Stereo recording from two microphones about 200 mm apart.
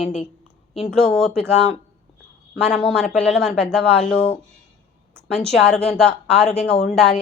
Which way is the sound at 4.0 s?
30° left (ahead or behind).